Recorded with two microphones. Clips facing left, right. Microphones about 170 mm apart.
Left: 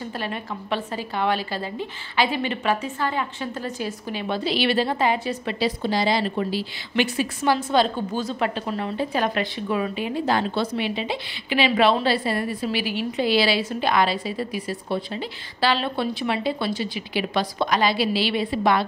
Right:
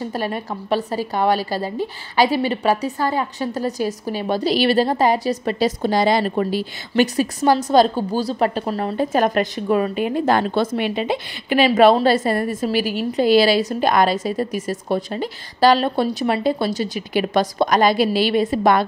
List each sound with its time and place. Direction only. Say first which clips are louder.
0.1 s a woman's voice: right 5 dB; 40° right (ahead or behind)